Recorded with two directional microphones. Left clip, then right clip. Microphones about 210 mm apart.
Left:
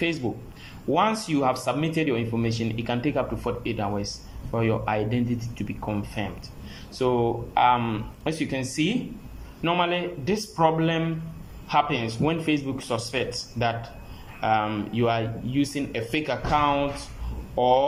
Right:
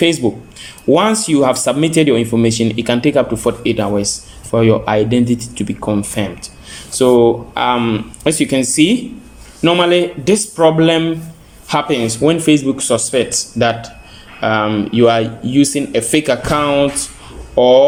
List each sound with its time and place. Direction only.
0.0 s speech: 45° right (ahead or behind)